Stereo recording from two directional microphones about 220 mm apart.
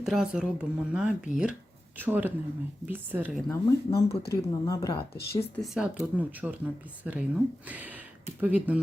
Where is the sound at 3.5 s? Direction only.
15° left (ahead or behind).